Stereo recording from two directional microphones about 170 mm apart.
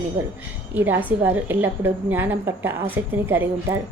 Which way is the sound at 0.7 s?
10° right (ahead or behind).